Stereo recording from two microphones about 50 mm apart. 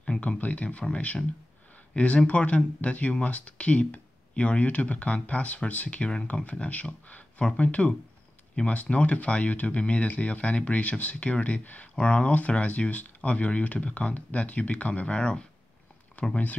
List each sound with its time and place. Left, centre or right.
0.0 s a sound: centre
0.4 s speech: left
16.2 s speech: left